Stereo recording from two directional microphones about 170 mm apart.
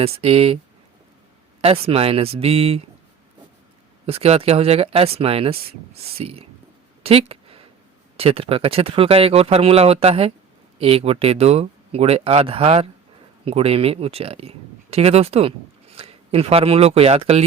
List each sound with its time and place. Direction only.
0.0 s speech: 35° right (ahead or behind)
1.6 s speech: 35° right (ahead or behind)
4.0 s speech: 35° right (ahead or behind)
7.0 s a sound: 35° right (ahead or behind)
8.1 s speech: 35° right (ahead or behind)